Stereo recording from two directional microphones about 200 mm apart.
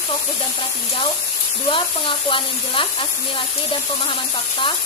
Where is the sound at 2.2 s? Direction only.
25° left (ahead or behind).